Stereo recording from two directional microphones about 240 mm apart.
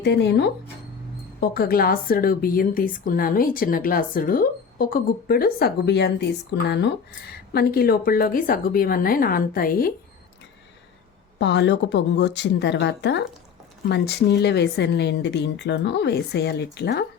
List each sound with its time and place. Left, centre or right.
0.0 s a woman's voice: left
11.3 s a woman's voice: left